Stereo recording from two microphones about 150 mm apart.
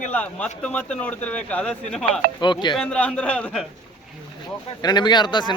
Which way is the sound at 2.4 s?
30° left (ahead or behind).